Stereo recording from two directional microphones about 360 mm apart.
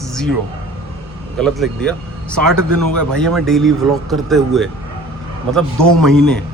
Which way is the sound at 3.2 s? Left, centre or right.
Centre.